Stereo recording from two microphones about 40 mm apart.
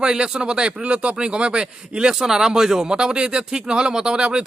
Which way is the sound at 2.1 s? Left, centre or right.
Centre.